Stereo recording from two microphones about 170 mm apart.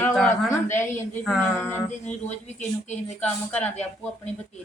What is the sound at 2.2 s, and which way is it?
Speech, 40° left (ahead or behind).